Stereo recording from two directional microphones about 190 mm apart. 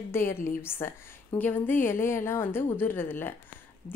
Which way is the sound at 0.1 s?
15° left (ahead or behind).